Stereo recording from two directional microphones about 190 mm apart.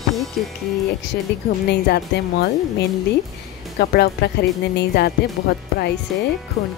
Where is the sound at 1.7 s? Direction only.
60° left (ahead or behind).